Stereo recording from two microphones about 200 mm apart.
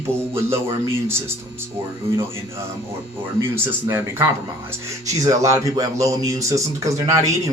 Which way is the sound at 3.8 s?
15° right (ahead or behind).